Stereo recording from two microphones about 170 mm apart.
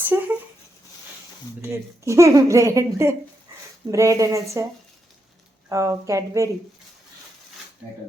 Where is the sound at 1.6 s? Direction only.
15° right (ahead or behind).